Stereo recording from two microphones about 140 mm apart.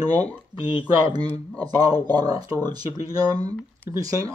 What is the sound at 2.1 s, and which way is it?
Speech, 30° right (ahead or behind).